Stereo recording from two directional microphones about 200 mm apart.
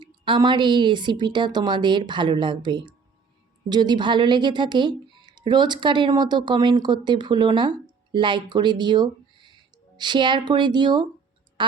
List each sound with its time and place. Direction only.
0.0 s a woman's voice: 20° right (ahead or behind)